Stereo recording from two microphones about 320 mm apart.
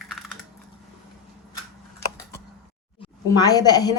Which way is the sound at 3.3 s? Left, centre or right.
Centre.